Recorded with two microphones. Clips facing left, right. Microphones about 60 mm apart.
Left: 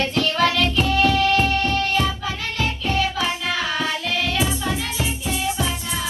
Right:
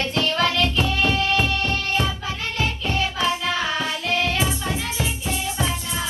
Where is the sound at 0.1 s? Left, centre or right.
Right.